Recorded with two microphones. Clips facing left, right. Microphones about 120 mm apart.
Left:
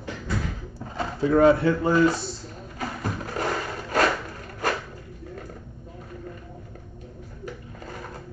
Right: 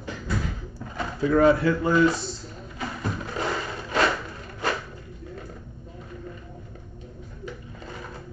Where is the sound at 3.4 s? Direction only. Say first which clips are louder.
Left 1 dB; 50° left (ahead or behind).